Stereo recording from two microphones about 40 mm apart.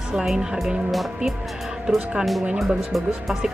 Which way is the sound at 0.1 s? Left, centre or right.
Centre.